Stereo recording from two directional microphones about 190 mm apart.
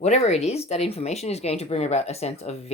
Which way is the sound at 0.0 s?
35° left (ahead or behind).